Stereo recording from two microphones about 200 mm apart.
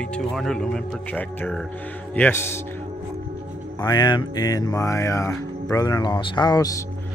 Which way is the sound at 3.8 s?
20° left (ahead or behind).